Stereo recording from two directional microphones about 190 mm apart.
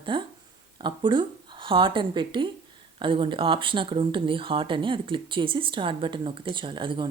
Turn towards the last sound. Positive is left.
turn(degrees=-25)  # may be behind; listen again after turning